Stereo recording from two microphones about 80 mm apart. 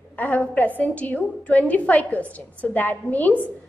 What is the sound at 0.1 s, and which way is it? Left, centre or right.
A woman's voice, centre.